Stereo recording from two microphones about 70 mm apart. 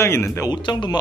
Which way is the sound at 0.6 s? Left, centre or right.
Left.